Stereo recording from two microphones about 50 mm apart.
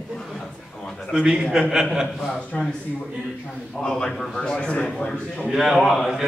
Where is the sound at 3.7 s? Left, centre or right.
Centre.